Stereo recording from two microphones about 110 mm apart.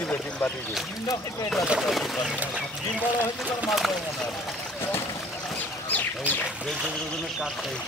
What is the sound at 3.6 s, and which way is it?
Speech, centre (ahead or behind).